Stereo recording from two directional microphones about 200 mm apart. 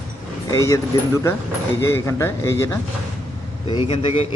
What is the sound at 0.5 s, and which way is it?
Speech, 15° left (ahead or behind).